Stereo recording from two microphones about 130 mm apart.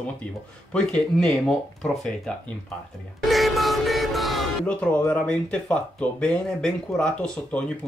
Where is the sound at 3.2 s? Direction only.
Centre (ahead or behind).